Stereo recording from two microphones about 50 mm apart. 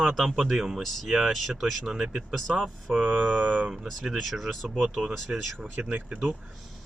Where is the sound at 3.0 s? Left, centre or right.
Right.